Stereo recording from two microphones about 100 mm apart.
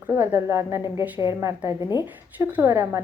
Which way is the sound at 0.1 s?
25° right (ahead or behind).